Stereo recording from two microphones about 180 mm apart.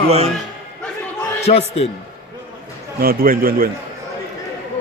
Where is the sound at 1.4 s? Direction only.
35° left (ahead or behind).